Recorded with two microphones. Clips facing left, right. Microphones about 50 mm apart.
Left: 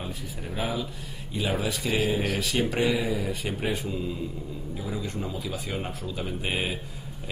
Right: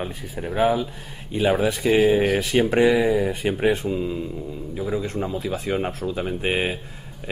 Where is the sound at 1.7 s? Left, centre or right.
Right.